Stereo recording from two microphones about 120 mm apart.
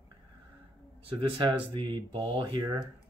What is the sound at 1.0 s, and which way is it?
Speech, 45° right (ahead or behind).